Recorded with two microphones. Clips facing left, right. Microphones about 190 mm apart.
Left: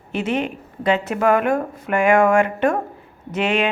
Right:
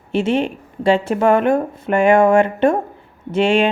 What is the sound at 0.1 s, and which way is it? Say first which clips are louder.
A woman's voice: right 5 dB; 30° right (ahead or behind).